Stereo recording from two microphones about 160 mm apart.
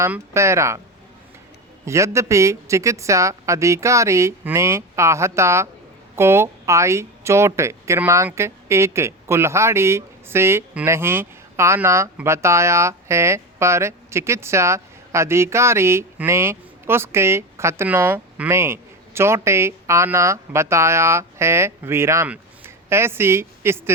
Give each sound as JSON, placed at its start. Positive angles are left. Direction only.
{"t": 0.0, "sound": "speech", "side_deg": -15}
{"t": 1.8, "sound": "a woman's voice", "side_deg": -20}